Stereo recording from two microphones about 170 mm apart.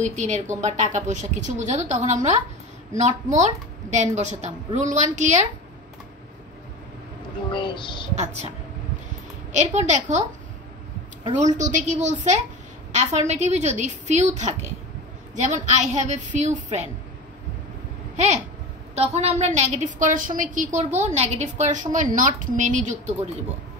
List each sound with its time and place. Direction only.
0.0 s a woman's voice: 45° right (ahead or behind)
7.5 s a sound: 30° left (ahead or behind)
8.2 s a woman's voice: 40° right (ahead or behind)
11.3 s a woman's voice: 45° right (ahead or behind)
18.1 s a woman's voice: 40° right (ahead or behind)